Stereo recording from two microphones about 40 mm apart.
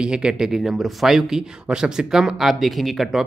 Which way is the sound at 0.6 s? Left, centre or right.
Centre.